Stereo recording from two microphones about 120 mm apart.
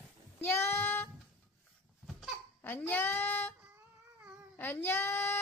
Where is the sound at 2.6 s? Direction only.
15° left (ahead or behind).